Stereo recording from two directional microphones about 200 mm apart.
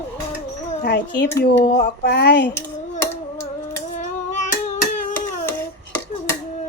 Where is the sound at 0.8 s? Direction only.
55° left (ahead or behind).